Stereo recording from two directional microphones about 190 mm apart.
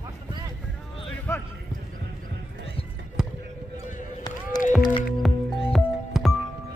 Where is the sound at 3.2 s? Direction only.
5° right (ahead or behind).